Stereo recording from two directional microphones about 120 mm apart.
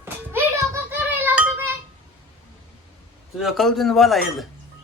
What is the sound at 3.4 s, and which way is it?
Speech, centre (ahead or behind).